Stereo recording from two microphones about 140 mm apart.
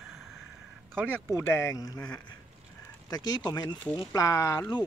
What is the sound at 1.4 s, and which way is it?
Speech, 20° left (ahead or behind).